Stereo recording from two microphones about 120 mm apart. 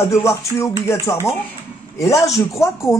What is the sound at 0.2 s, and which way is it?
Speech, 25° left (ahead or behind).